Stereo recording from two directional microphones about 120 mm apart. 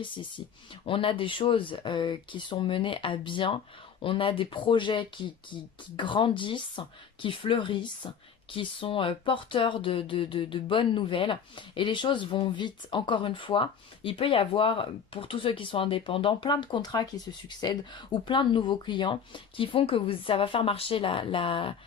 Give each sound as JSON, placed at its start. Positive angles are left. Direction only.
{"t": 0.0, "sound": "speech", "side_deg": 45}